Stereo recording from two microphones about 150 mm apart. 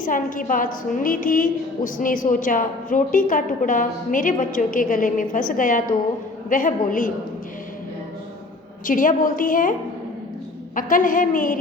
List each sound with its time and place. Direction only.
0.0 s a woman's voice: 65° left (ahead or behind)
8.9 s a woman's voice: 60° left (ahead or behind)
10.8 s a woman's voice: 65° left (ahead or behind)